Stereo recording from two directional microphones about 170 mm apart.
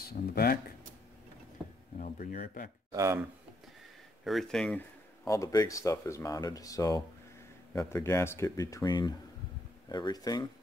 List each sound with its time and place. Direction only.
0.0 s speech: 65° left (ahead or behind)
2.0 s speech: 55° left (ahead or behind)
2.9 s speech: 15° right (ahead or behind)
4.2 s speech: centre (ahead or behind)
5.2 s speech: 20° left (ahead or behind)